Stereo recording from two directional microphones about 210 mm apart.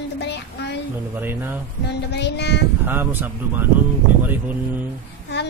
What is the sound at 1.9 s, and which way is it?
Child singing, 55° left (ahead or behind).